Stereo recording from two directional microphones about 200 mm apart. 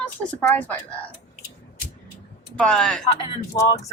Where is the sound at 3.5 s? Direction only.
25° left (ahead or behind).